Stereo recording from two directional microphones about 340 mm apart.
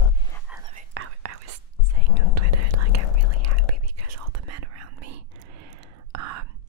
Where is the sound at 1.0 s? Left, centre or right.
Right.